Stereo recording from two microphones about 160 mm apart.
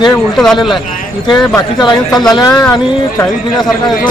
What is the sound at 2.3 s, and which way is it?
Speech, 25° left (ahead or behind).